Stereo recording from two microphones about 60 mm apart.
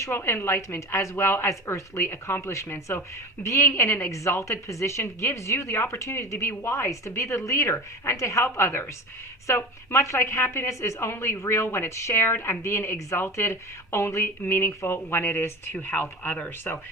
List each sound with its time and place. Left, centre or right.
0.0 s a woman's voice: left
3.7 s a woman's voice: left